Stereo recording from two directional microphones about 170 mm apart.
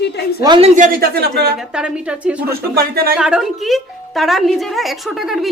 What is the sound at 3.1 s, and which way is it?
Speech, 5° right (ahead or behind).